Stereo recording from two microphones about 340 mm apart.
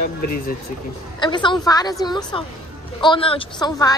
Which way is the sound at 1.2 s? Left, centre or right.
Centre.